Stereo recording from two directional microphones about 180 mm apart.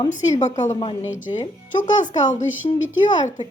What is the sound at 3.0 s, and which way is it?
Speech, 25° left (ahead or behind).